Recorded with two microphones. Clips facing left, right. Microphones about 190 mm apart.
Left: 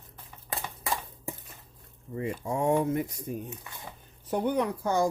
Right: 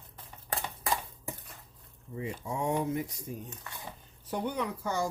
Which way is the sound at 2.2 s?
55° left (ahead or behind).